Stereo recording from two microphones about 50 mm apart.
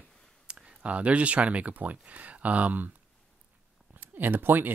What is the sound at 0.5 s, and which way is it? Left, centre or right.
Clicking, centre.